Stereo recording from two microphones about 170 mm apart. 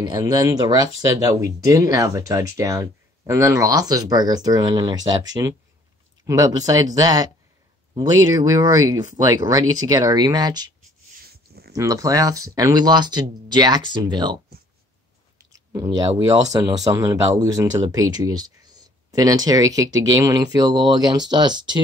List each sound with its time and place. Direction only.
0.0 s speech: 20° right (ahead or behind)
11.7 s speech: 20° right (ahead or behind)
15.5 s a sound: 20° right (ahead or behind)
16.3 s speech: 20° right (ahead or behind)